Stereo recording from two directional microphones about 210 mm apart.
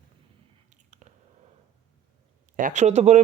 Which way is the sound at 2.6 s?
35° right (ahead or behind).